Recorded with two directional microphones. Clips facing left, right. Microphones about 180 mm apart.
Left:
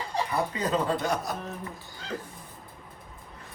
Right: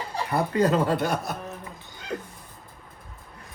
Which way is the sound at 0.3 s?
55° right (ahead or behind).